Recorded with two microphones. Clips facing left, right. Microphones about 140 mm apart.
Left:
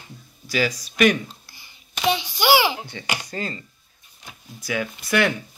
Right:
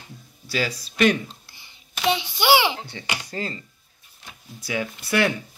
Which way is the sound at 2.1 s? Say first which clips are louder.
Even; 20° right (ahead or behind).